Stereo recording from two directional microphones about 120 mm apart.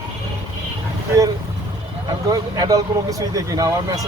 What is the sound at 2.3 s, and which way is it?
Speech, 30° right (ahead or behind).